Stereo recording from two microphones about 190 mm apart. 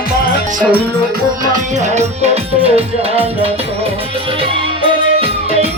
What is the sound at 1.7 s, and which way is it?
Music, 35° right (ahead or behind).